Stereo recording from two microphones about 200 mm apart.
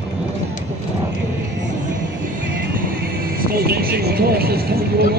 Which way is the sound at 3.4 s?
50° right (ahead or behind).